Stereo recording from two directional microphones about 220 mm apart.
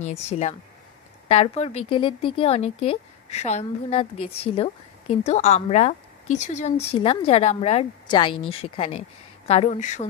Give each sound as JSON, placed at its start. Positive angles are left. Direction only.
{"t": 0.0, "sound": "a woman's voice", "side_deg": 30}